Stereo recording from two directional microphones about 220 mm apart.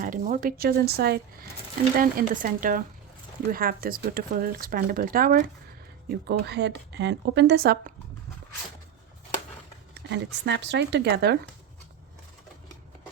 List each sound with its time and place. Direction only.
0.0 s speech: 40° right (ahead or behind)
10.1 s speech: 50° right (ahead or behind)